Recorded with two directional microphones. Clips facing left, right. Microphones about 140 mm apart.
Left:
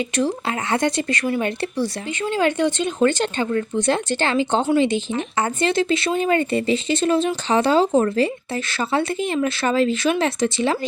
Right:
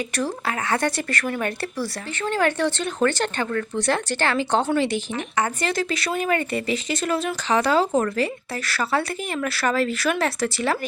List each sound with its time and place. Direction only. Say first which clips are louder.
0.2 s speech: left 4 dB; 25° left (ahead or behind)